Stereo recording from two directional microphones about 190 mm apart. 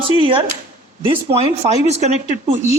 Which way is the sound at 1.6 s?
20° right (ahead or behind).